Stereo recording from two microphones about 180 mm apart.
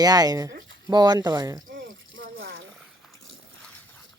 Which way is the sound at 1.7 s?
90° right.